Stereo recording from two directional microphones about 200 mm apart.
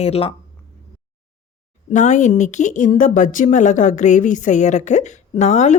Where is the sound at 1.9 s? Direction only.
35° left (ahead or behind).